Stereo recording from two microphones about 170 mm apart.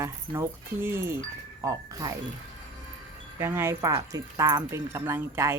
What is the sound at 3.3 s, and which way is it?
Speech, 15° right (ahead or behind).